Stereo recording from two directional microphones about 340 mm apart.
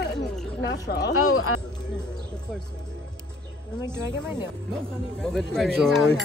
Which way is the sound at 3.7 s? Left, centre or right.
Centre.